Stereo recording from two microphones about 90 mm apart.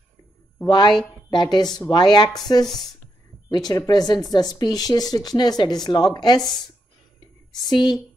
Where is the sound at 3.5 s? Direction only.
50° left (ahead or behind).